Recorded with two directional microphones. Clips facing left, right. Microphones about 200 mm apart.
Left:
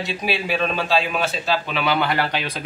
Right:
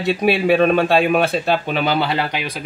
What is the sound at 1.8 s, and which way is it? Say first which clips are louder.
Speech: right 3 dB; 40° right (ahead or behind).